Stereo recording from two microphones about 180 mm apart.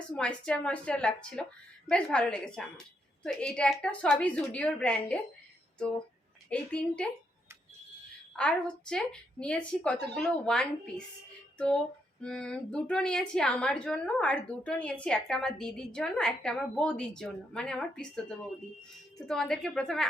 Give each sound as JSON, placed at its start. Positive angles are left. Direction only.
{"t": 0.2, "sound": "a woman's voice", "side_deg": 5}
{"t": 6.5, "sound": "a woman's voice", "side_deg": 5}
{"t": 8.4, "sound": "a woman's voice", "side_deg": 5}
{"t": 11.5, "sound": "music", "side_deg": 5}
{"t": 12.2, "sound": "a woman's voice", "side_deg": 5}